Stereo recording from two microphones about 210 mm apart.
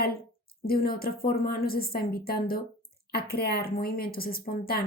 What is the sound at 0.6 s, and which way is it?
A woman's voice, 45° left (ahead or behind).